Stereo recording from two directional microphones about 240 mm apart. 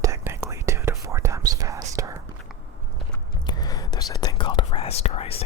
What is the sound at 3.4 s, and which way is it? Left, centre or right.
Whispering, centre.